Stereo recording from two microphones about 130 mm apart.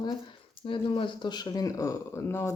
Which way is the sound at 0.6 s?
40° left (ahead or behind).